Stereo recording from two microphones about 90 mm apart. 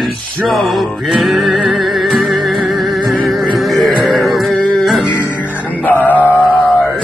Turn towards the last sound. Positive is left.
turn(degrees=15)  # may be behind; listen again after turning